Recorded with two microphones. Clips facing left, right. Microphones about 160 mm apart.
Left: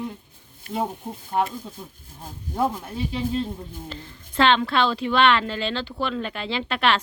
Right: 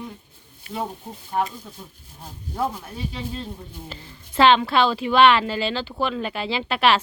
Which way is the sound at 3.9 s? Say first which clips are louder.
Left 2 dB; 5° right (ahead or behind).